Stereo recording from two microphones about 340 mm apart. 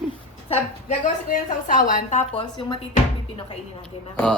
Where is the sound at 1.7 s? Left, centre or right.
Left.